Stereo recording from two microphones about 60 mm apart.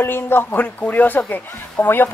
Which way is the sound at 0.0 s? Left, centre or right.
Left.